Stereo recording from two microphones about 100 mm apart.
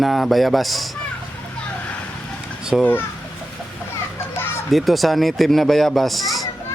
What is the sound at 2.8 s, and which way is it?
Speech, 20° left (ahead or behind).